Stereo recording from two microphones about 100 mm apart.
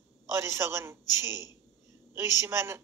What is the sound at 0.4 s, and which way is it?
Speech, 25° right (ahead or behind).